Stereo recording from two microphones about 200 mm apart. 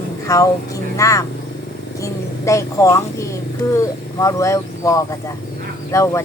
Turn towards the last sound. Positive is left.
turn(degrees=15)  # may be behind; listen again after turning